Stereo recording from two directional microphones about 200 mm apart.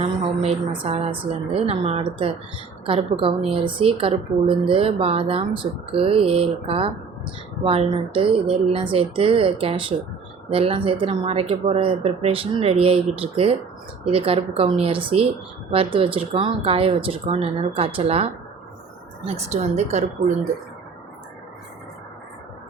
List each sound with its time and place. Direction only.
0.0 s a woman's voice: 30° right (ahead or behind)
19.4 s a woman's voice: 35° right (ahead or behind)